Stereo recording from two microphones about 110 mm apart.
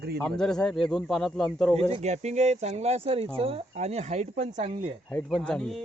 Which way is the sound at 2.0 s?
90° right.